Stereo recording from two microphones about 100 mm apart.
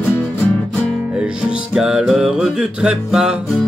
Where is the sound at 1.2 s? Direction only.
10° right (ahead or behind).